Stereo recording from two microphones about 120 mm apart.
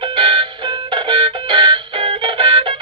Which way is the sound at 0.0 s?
45° right (ahead or behind).